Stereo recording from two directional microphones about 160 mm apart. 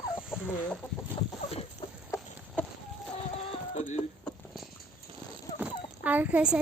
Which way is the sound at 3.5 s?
45° left (ahead or behind).